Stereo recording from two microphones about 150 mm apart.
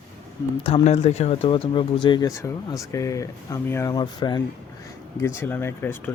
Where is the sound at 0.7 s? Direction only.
40° left (ahead or behind).